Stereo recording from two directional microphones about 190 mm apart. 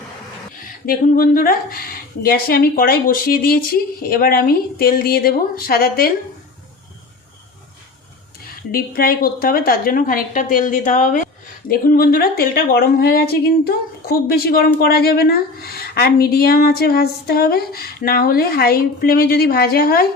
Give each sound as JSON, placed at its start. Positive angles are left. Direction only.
{"t": 0.9, "sound": "a woman's voice", "side_deg": 50}
{"t": 8.4, "sound": "a woman's voice", "side_deg": 50}